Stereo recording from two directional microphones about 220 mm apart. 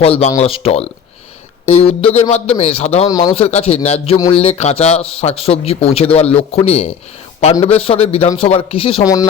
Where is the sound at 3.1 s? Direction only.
15° left (ahead or behind).